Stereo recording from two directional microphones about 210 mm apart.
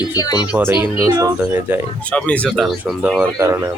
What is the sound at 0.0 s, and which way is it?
Speech, 15° left (ahead or behind).